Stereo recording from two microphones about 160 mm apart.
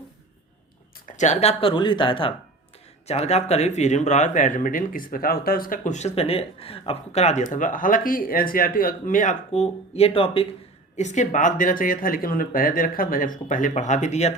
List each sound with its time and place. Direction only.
1.0 s speech: 50° left (ahead or behind)
10.9 s speech: 50° left (ahead or behind)